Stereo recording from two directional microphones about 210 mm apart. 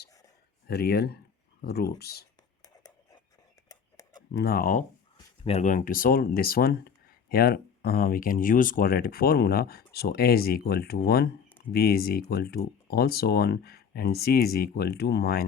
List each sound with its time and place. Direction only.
0.7 s speech: 50° left (ahead or behind)
4.3 s speech: 50° left (ahead or behind)
5.1 s speech: 25° left (ahead or behind); by 15.4 s 50° left (ahead or behind)